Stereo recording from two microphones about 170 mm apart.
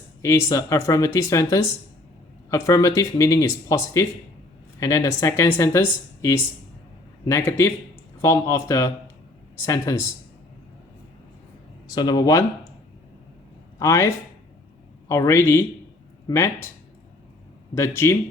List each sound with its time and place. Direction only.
0.2 s speech: 15° left (ahead or behind)
11.9 s speech: 25° left (ahead or behind)
13.7 s speech: 20° left (ahead or behind)
17.7 s speech: 15° left (ahead or behind)